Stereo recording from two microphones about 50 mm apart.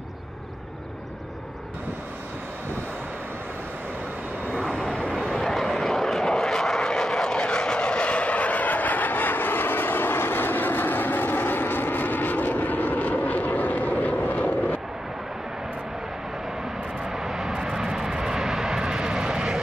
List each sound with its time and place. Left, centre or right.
4.6 s vehicle: left
17.1 s vehicle: centre